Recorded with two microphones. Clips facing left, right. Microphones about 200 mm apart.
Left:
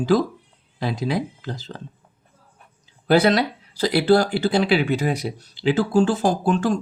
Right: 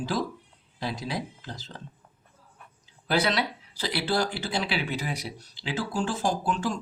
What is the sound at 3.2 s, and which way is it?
Speech, 50° left (ahead or behind).